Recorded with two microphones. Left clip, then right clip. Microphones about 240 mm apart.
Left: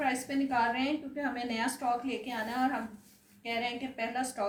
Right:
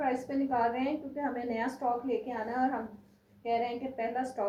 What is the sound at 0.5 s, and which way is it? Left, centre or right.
A woman's voice, left.